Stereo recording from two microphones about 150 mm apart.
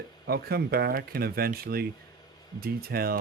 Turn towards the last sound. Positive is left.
turn(degrees=-90)